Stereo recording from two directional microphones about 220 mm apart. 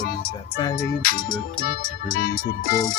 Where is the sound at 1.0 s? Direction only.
40° left (ahead or behind).